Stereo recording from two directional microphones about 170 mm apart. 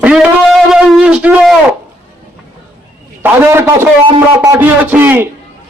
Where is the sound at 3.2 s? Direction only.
15° right (ahead or behind).